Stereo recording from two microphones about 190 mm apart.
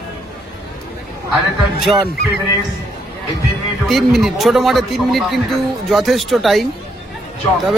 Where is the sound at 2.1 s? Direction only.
60° left (ahead or behind).